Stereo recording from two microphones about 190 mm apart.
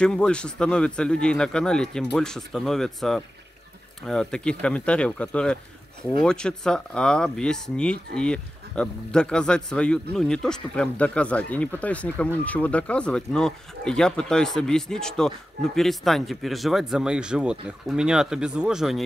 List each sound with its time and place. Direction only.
0.0 s speech: 5° left (ahead or behind)